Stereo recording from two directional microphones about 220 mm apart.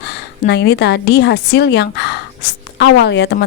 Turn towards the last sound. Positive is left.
turn(degrees=50)  # may be behind; listen again after turning